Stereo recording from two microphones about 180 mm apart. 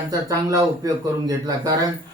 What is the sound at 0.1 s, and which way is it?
Speech, 20° right (ahead or behind).